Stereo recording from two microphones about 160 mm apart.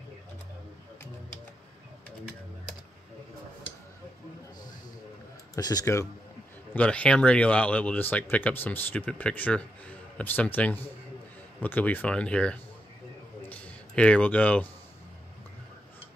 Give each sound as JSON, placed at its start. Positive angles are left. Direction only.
{"t": 5.6, "sound": "speech", "side_deg": 25}
{"t": 6.7, "sound": "speech", "side_deg": 10}
{"t": 13.5, "sound": "a sound", "side_deg": 10}